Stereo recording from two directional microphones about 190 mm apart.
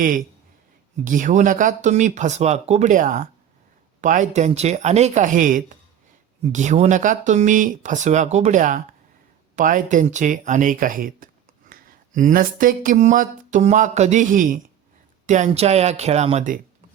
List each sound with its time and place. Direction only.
1.0 s speech: 40° right (ahead or behind)